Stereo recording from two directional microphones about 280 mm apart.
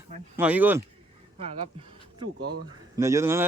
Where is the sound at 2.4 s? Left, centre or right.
Right.